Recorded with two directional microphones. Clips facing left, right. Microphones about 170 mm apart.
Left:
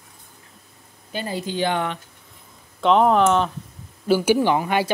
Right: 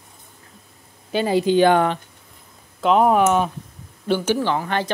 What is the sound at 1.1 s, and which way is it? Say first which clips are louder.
Speech: right 10 dB; 90° right.